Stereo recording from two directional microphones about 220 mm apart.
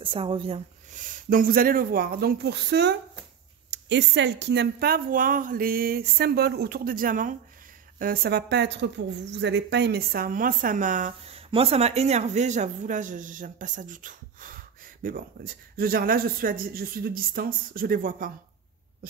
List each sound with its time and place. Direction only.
0.0 s a woman's voice: 25° right (ahead or behind)
1.3 s a woman's voice: 40° right (ahead or behind)